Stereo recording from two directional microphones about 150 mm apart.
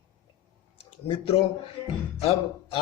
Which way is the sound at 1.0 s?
35° left (ahead or behind).